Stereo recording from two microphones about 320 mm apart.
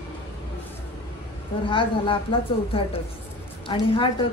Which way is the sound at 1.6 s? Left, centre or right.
Centre.